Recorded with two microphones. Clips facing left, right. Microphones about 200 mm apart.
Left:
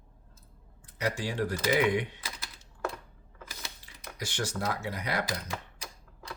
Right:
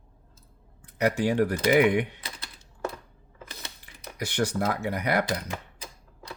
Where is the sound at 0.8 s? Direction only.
60° right (ahead or behind).